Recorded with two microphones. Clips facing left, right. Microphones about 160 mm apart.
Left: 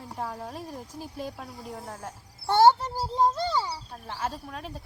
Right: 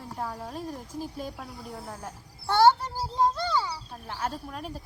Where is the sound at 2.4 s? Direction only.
15° left (ahead or behind).